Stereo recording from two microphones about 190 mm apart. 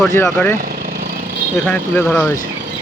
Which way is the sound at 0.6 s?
50° right (ahead or behind).